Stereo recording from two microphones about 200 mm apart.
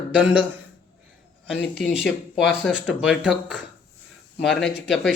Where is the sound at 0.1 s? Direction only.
5° right (ahead or behind).